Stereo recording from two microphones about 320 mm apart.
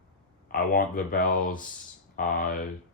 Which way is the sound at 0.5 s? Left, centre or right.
Left.